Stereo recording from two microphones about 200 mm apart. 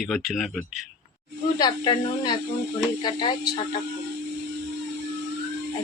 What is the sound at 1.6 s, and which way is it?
Speech, 20° left (ahead or behind).